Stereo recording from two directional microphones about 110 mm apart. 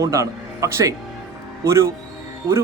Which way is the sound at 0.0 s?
30° right (ahead or behind).